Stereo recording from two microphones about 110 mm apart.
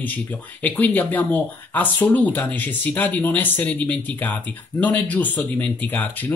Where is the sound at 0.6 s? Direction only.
15° left (ahead or behind).